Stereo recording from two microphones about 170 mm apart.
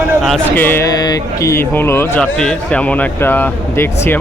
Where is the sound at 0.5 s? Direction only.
10° left (ahead or behind).